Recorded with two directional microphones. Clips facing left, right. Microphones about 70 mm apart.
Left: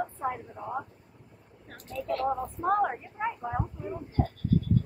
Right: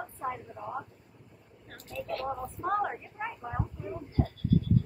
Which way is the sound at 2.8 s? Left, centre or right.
Centre.